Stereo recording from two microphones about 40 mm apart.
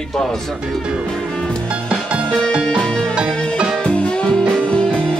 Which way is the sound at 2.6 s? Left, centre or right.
Centre.